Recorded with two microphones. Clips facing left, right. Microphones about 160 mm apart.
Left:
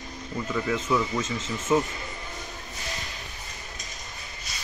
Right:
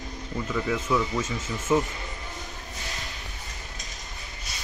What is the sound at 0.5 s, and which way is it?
Speech, 5° left (ahead or behind).